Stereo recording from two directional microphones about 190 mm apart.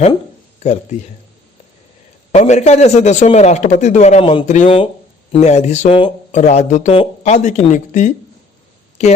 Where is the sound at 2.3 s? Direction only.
35° left (ahead or behind).